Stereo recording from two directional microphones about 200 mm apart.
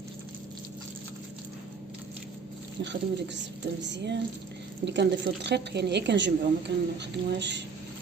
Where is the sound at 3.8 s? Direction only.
60° right (ahead or behind).